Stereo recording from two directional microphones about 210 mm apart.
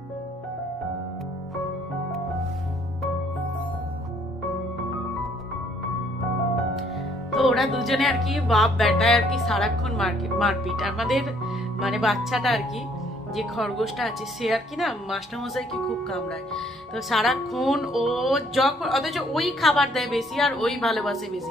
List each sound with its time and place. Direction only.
7.2 s speech: centre (ahead or behind)